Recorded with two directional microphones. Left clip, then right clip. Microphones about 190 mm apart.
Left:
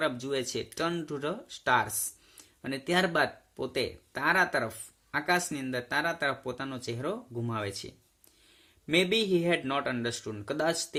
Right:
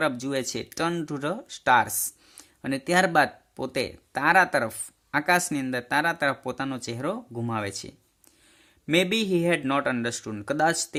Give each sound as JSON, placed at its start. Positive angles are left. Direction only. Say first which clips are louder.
{"t": 0.0, "sound": "speech", "louder": "right 4 dB", "side_deg": -45}